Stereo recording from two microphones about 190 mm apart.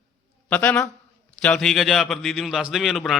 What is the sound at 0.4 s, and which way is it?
A man's voice, 5° left (ahead or behind).